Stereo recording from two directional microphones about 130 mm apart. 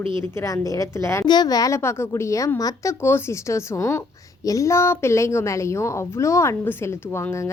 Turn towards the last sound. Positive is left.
turn(degrees=20)  # may be behind; listen again after turning